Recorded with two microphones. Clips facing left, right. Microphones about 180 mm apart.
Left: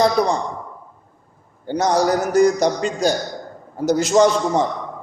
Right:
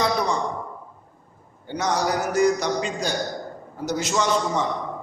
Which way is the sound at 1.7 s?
45° left (ahead or behind).